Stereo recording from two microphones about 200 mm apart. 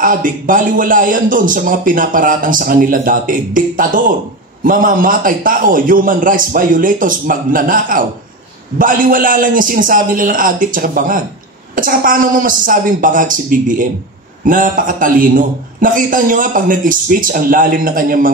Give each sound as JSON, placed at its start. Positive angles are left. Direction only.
{"t": 0.0, "sound": "a man's voice", "side_deg": -40}